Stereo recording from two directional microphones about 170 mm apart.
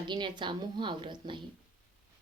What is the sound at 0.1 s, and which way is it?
A woman's voice, 25° right (ahead or behind).